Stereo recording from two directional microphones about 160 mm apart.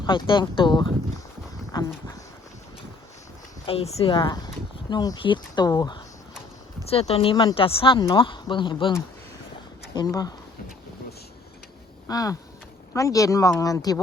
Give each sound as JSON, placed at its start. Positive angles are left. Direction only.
{"t": 0.0, "sound": "speech", "side_deg": 30}
{"t": 3.7, "sound": "speech", "side_deg": 40}
{"t": 6.8, "sound": "speech", "side_deg": 40}
{"t": 9.9, "sound": "speech", "side_deg": 25}
{"t": 12.0, "sound": "speech", "side_deg": 20}